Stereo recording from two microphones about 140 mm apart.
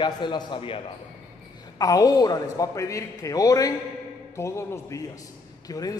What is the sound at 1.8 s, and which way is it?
A man's voice, 25° left (ahead or behind).